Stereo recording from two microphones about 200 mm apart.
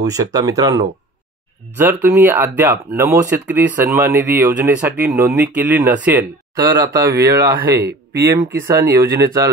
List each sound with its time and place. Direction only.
0.1 s speech: 20° right (ahead or behind)
7.8 s speech: 55° right (ahead or behind)
8.3 s speech: 15° right (ahead or behind)